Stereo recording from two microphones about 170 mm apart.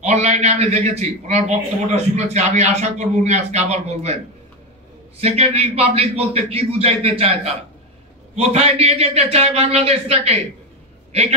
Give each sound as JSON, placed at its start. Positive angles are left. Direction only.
{"t": 0.0, "sound": "a man's voice", "side_deg": -40}